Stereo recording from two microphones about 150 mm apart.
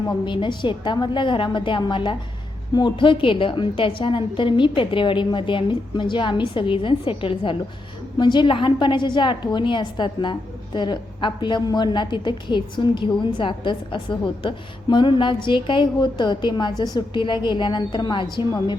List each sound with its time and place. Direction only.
0.1 s a woman's voice: 30° left (ahead or behind)